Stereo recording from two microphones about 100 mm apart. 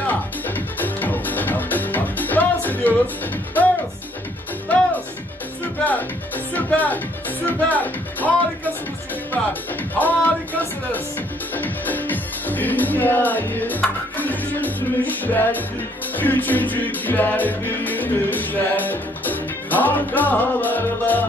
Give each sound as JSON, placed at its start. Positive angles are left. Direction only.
{"t": 0.0, "sound": "music", "side_deg": 20}
{"t": 5.9, "sound": "speech", "side_deg": 15}
{"t": 9.3, "sound": "speech", "side_deg": 15}